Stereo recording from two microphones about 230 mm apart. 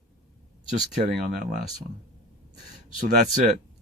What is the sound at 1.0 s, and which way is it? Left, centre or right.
Speech, right.